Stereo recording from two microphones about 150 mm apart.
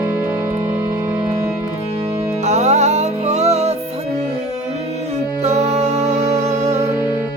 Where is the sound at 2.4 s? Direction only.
50° right (ahead or behind).